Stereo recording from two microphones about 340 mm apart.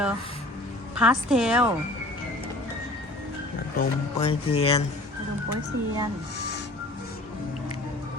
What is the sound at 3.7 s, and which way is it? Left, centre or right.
Speech, centre.